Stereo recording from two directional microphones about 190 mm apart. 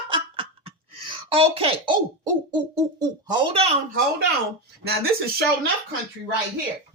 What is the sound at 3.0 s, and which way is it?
Speech, 25° right (ahead or behind).